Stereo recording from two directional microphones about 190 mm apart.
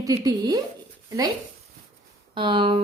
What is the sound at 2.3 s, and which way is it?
Speech, 25° right (ahead or behind).